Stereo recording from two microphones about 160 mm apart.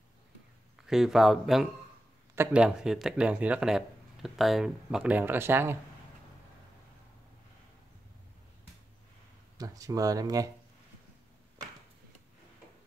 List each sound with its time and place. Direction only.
0.7 s speech: 5° right (ahead or behind)
9.6 s speech: 20° right (ahead or behind)